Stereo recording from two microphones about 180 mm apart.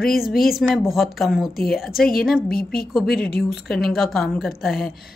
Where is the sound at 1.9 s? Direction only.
55° left (ahead or behind).